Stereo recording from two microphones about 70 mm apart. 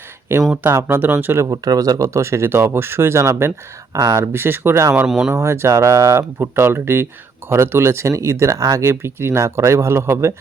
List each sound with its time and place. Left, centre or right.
0.7 s speech: right
0.9 s speech: right
1.5 s speech: right
4.3 s speech: right
5.0 s speech: centre
5.3 s speech: right
8.8 s speech: right